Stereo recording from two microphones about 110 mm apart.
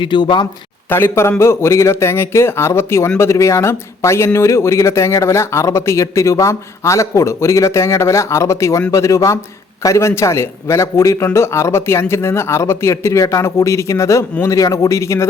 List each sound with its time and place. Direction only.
0.0 s speech: 45° left (ahead or behind)
0.9 s speech: 20° left (ahead or behind)